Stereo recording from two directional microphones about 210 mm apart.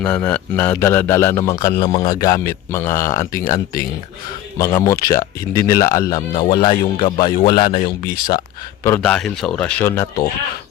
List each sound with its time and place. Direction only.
0.0 s a man's voice: 5° left (ahead or behind); by 7.9 s 20° left (ahead or behind)
8.8 s speech: 10° left (ahead or behind)